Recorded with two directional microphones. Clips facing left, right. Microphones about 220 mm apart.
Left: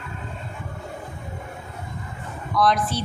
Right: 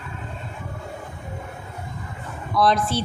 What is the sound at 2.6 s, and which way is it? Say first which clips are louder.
Speech: right 1 dB; 25° right (ahead or behind).